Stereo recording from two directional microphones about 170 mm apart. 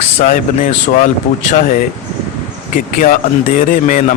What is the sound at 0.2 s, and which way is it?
A man's voice, 50° left (ahead or behind).